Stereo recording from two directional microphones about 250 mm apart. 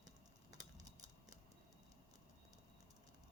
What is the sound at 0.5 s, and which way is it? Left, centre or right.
Typing, centre.